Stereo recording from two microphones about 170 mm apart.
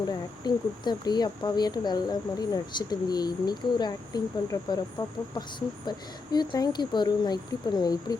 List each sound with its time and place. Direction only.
0.1 s speech: 25° left (ahead or behind)